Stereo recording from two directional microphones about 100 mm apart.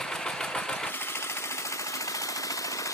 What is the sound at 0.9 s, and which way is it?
Jackhammer, 20° left (ahead or behind).